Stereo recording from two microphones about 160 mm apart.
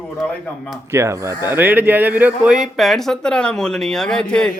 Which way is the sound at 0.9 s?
20° right (ahead or behind).